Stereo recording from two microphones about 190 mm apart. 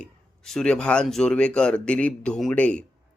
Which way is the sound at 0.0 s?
5° left (ahead or behind).